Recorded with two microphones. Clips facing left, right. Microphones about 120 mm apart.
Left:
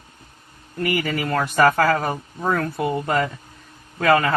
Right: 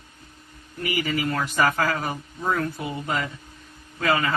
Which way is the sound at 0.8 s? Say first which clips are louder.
Left 3 dB; 55° left (ahead or behind).